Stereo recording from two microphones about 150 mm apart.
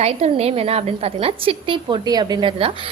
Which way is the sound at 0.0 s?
45° right (ahead or behind).